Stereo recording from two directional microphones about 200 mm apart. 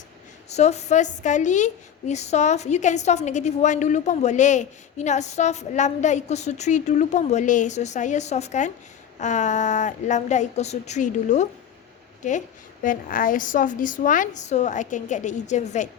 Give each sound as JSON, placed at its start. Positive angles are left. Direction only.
{"t": 0.5, "sound": "a woman's voice", "side_deg": 35}
{"t": 12.8, "sound": "a woman's voice", "side_deg": 45}